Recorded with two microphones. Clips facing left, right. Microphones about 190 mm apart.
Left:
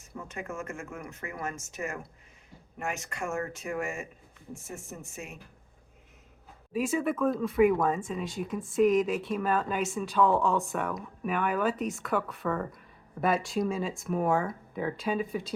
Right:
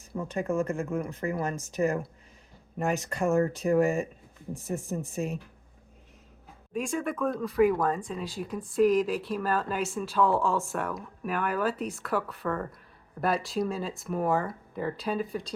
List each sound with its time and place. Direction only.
0.3 s speech: 35° right (ahead or behind)
6.7 s speech: 5° left (ahead or behind)